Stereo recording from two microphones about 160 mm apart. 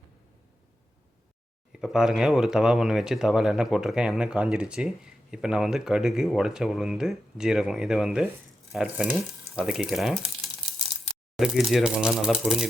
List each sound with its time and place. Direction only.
1.7 s speech: 5° right (ahead or behind)